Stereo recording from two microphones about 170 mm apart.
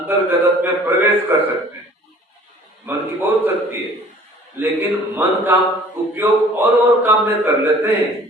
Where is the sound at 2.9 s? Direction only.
10° right (ahead or behind).